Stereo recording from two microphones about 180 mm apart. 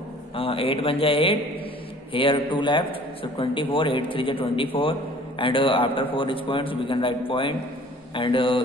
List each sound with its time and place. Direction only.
0.4 s a man's voice: 30° left (ahead or behind)